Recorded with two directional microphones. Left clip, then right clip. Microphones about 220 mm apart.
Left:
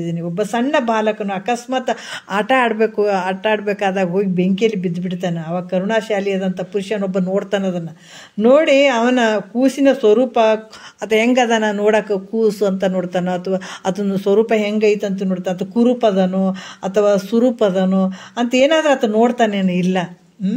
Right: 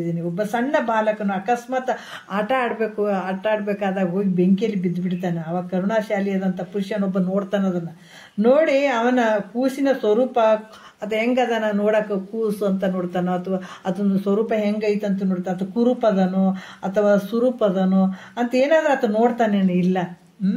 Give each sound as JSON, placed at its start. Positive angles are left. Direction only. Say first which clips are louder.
{"t": 0.0, "sound": "speech", "louder": "left 3 dB", "side_deg": 30}